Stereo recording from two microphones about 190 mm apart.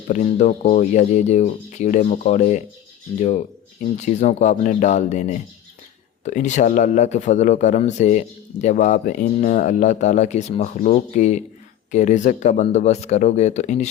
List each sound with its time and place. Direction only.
0.1 s speech: 40° left (ahead or behind)